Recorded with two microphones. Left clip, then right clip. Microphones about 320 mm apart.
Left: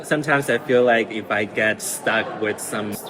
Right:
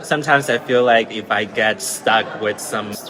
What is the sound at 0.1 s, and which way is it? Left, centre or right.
A man's voice, centre.